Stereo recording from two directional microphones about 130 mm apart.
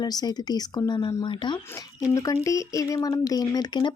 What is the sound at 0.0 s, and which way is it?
Speech, 30° left (ahead or behind).